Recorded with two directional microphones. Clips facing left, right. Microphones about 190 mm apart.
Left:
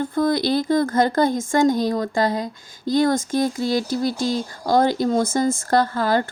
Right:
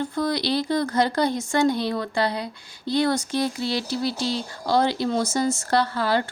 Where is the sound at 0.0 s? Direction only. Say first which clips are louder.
Left 5 dB; 50° left (ahead or behind).